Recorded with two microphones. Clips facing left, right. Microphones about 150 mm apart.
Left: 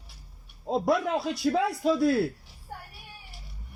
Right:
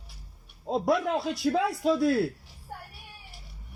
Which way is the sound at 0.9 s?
50° right (ahead or behind).